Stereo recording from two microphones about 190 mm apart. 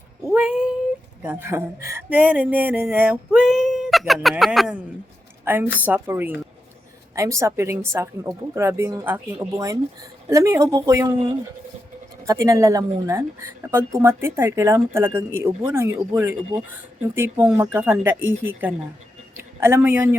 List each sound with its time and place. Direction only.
0.3 s speech: 5° right (ahead or behind)
12.2 s speech: 15° right (ahead or behind)